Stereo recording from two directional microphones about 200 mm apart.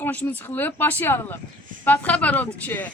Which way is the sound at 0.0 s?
10° left (ahead or behind).